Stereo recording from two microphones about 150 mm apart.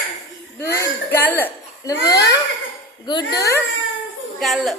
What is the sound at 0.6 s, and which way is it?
Speech, 15° left (ahead or behind).